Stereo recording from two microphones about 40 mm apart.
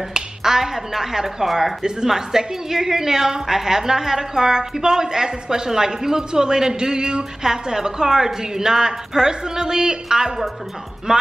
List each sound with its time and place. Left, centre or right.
0.1 s a woman's voice: centre
1.8 s a woman's voice: centre